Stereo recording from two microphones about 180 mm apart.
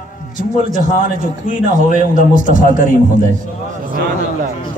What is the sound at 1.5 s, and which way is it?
Speech, 45° right (ahead or behind).